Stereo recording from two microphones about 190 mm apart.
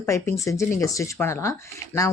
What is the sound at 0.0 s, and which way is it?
Speech, 15° left (ahead or behind).